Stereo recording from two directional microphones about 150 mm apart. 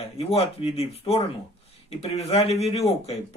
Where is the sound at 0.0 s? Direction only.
40° left (ahead or behind).